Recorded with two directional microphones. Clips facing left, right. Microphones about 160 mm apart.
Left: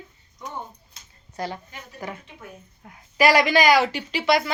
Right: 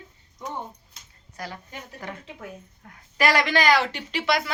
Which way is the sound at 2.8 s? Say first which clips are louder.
Left 4 dB; 10° left (ahead or behind).